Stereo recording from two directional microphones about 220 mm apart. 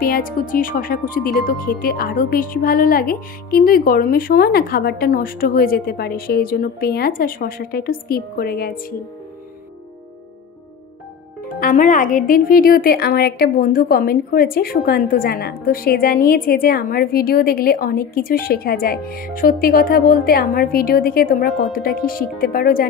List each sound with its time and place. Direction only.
0.0 s speech: 40° left (ahead or behind)
11.4 s speech: 35° left (ahead or behind)